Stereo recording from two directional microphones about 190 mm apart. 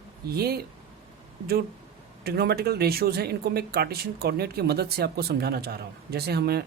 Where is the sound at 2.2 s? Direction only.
55° right (ahead or behind).